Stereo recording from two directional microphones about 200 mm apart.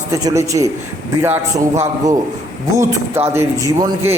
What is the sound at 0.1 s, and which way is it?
A man's voice, 15° right (ahead or behind).